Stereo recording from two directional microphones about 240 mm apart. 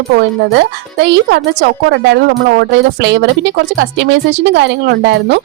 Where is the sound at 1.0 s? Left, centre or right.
Right.